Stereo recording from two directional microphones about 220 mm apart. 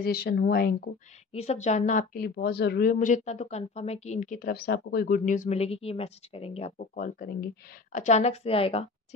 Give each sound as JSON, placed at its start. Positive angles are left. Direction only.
{"t": 0.0, "sound": "speech", "side_deg": 45}
{"t": 1.3, "sound": "speech", "side_deg": 30}
{"t": 7.2, "sound": "speech", "side_deg": 45}
{"t": 7.9, "sound": "a woman's voice", "side_deg": 30}